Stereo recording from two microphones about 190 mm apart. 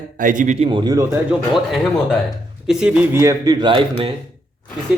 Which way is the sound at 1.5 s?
Centre (ahead or behind).